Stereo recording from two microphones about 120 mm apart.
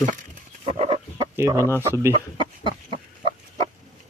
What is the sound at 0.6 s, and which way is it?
Chicken, 55° right (ahead or behind).